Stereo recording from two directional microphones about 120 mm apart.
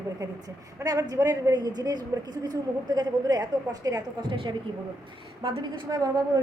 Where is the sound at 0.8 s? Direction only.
30° right (ahead or behind).